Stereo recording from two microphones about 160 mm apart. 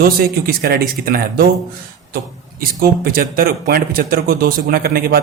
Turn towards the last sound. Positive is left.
turn(degrees=-70)  # may be behind; listen again after turning